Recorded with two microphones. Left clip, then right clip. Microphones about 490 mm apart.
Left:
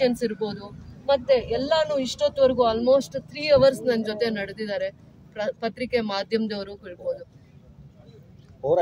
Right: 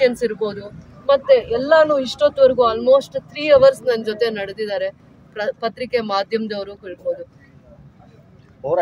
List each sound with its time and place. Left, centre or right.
0.0 s speech: left